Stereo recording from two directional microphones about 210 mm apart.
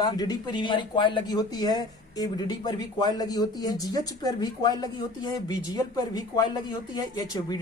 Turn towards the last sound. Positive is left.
turn(degrees=20)  # may be behind; listen again after turning